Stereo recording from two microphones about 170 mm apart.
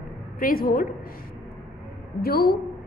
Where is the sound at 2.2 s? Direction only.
60° left (ahead or behind).